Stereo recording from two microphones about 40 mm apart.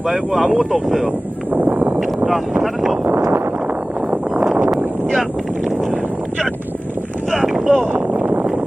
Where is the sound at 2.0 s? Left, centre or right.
Centre.